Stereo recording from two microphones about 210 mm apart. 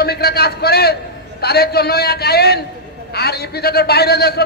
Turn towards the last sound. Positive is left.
turn(degrees=50)  # may be behind; listen again after turning